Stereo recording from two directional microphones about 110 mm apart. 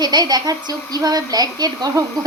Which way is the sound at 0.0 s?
35° right (ahead or behind).